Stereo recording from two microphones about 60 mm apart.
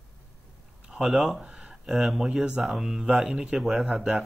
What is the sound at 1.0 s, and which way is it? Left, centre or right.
A man's voice, centre.